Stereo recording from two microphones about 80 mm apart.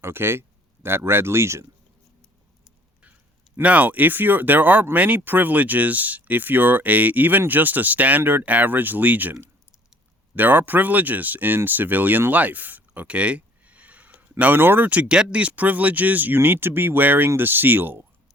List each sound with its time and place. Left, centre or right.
0.0 s speech: right
3.6 s speech: centre
10.3 s speech: right